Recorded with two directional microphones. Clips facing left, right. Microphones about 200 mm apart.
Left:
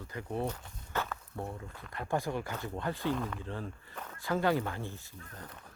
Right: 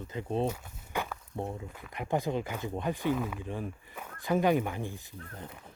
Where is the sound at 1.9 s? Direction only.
20° right (ahead or behind).